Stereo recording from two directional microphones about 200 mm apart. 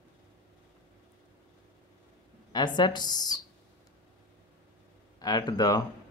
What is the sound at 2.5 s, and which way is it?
Speech, 20° left (ahead or behind).